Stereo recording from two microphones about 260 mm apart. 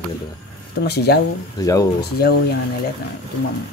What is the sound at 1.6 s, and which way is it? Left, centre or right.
Speech, centre.